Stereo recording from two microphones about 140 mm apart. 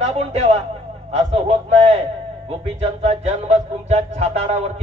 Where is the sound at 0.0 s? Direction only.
50° right (ahead or behind).